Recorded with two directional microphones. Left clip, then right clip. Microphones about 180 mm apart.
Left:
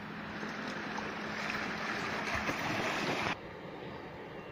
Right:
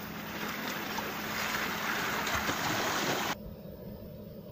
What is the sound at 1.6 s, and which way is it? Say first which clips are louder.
Vehicle: right 4 dB; 25° left (ahead or behind).